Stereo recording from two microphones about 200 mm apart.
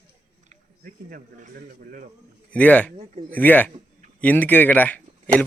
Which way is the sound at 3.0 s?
40° right (ahead or behind).